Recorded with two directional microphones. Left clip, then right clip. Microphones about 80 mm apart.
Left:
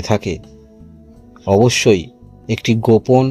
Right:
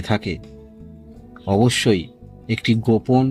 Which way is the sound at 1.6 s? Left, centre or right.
Left.